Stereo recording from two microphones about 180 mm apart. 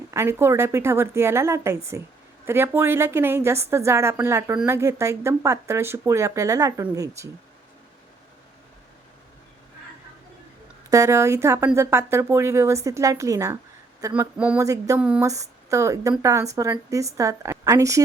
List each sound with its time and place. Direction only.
0.1 s speech: 15° right (ahead or behind)
10.8 s speech: 15° right (ahead or behind)